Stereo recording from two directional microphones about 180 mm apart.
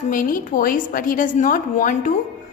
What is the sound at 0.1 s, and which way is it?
A woman's voice, 50° left (ahead or behind).